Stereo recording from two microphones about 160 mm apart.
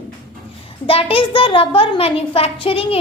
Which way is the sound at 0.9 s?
35° left (ahead or behind).